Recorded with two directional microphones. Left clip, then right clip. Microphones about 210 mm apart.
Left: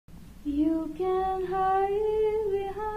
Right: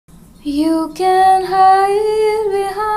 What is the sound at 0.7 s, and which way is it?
Female singing, 20° right (ahead or behind).